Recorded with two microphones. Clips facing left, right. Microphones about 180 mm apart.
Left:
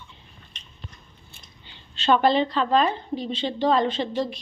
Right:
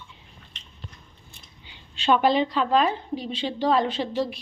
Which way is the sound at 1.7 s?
10° right (ahead or behind).